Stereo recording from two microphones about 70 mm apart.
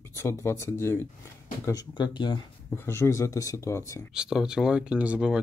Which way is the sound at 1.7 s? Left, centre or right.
Left.